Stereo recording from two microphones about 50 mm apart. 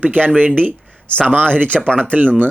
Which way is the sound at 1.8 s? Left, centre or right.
Left.